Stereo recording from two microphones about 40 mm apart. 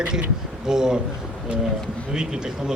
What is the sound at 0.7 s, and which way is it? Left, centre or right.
Speech, centre.